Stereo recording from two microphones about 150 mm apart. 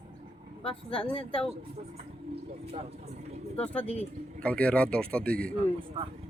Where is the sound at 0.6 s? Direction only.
40° left (ahead or behind).